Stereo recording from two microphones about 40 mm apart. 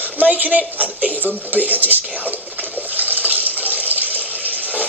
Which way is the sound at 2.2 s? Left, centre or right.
Right.